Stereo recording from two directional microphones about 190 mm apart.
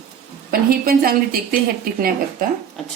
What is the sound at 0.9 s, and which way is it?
Speech, 50° right (ahead or behind).